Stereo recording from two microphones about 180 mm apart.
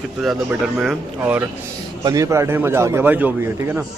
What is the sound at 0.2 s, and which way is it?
A man's voice, 5° right (ahead or behind).